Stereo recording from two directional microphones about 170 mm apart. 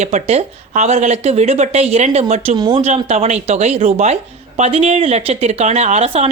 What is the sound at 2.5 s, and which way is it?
Speech, 25° right (ahead or behind).